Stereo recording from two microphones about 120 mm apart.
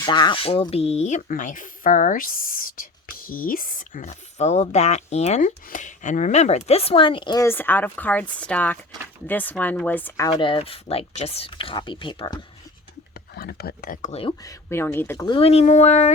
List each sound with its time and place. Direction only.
0.0 s speech: 40° left (ahead or behind)
0.4 s speech: 50° left (ahead or behind); by 2.1 s 90° left
3.8 s speech: 85° left; by 7.3 s 45° left (ahead or behind)
7.3 s speech: 20° left (ahead or behind)
10.2 s speech: 45° left (ahead or behind)
14.4 s speech: 20° left (ahead or behind)
15.3 s speech: 55° left (ahead or behind)